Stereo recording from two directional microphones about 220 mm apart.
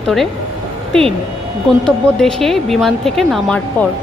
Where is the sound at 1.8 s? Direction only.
5° left (ahead or behind).